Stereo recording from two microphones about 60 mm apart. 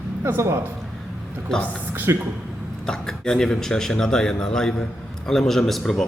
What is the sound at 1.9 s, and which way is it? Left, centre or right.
Speech, right.